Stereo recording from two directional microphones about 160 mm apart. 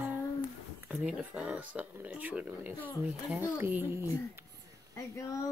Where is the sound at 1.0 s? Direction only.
5° right (ahead or behind).